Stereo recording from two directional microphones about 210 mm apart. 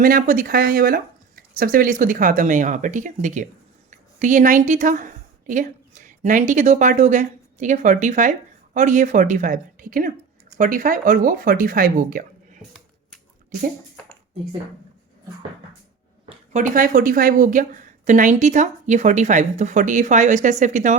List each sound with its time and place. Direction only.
0.0 s speech: 40° right (ahead or behind)
16.3 s speech: 35° right (ahead or behind)